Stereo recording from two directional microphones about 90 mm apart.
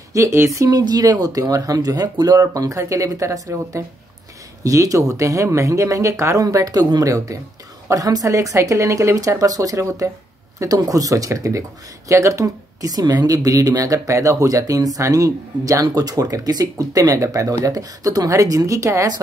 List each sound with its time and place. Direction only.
0.1 s speech: 35° right (ahead or behind)